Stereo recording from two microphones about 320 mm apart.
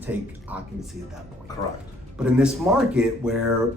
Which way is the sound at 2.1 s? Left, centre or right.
Centre.